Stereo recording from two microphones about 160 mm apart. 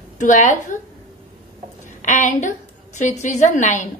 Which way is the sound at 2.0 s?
50° left (ahead or behind).